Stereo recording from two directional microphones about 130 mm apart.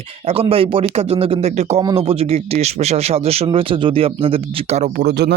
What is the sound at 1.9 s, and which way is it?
Speech, 50° right (ahead or behind).